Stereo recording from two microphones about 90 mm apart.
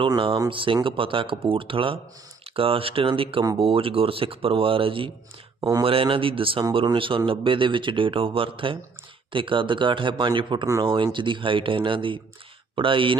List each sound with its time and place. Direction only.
0.5 s speech: 75° right (ahead or behind)
2.6 s speech: 90° right
5.5 s speech: 45° right (ahead or behind)
5.8 s speech: 90° right; by 13.1 s 70° right (ahead or behind)